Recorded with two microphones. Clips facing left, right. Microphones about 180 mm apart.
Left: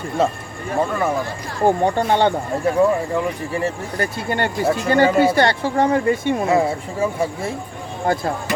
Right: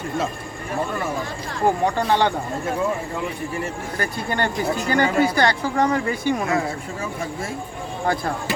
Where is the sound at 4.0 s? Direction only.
25° left (ahead or behind).